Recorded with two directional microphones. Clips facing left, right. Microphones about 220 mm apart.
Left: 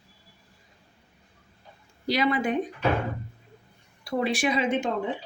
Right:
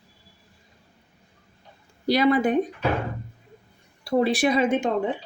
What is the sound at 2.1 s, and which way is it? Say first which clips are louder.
Speech: right 5 dB; 35° right (ahead or behind).